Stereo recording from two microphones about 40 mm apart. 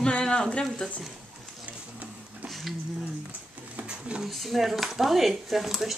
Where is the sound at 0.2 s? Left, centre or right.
Centre.